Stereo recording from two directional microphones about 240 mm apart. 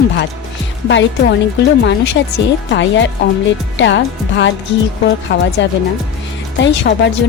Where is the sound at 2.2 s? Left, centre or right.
Left.